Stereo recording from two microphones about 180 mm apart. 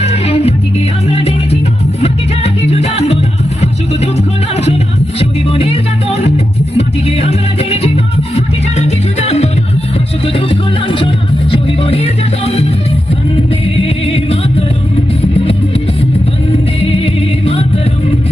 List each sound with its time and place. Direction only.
0.0 s music: 35° left (ahead or behind)
5.2 s music: 30° left (ahead or behind)
13.7 s music: 35° left (ahead or behind)
16.8 s music: 30° left (ahead or behind)